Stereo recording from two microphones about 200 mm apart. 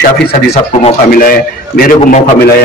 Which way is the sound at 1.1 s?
45° left (ahead or behind).